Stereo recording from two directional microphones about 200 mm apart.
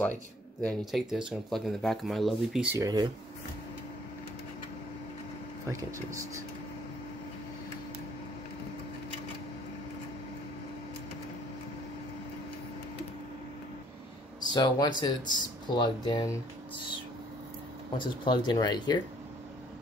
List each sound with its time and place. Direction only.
0.6 s speech: 5° left (ahead or behind)
2.8 s speech: 20° right (ahead or behind)
5.7 s speech: 15° right (ahead or behind)
14.4 s speech: 20° left (ahead or behind)
17.9 s speech: 25° left (ahead or behind)